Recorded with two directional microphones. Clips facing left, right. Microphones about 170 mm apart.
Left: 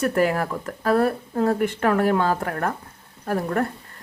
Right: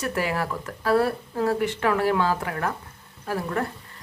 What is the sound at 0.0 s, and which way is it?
Speech, 50° left (ahead or behind).